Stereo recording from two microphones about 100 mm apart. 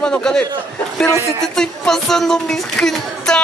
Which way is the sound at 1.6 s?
5° left (ahead or behind).